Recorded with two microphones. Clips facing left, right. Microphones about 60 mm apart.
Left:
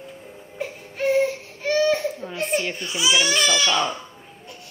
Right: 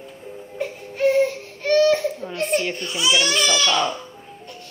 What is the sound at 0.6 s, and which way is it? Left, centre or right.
Baby cry, centre.